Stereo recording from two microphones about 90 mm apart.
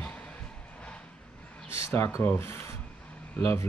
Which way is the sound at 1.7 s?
30° left (ahead or behind).